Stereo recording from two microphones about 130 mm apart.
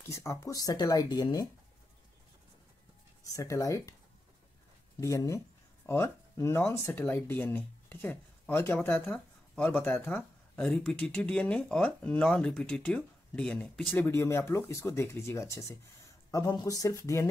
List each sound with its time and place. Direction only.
0.1 s speech: 20° left (ahead or behind)
3.3 s speech: 25° left (ahead or behind)
5.0 s speech: 25° left (ahead or behind); by 14.0 s 5° left (ahead or behind)
14.0 s speech: 15° left (ahead or behind)